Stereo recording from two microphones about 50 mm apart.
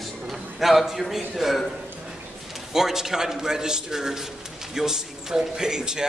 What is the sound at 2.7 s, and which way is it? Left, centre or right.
A man's voice, centre.